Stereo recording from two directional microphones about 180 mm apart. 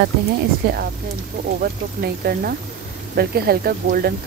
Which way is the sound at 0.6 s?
55° right (ahead or behind).